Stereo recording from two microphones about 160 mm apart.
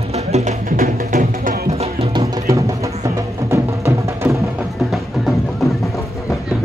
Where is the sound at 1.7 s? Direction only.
40° right (ahead or behind).